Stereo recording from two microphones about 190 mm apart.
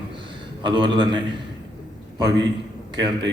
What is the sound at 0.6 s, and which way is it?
Speech, 25° right (ahead or behind).